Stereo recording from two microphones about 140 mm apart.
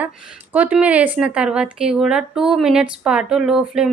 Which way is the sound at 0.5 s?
10° right (ahead or behind).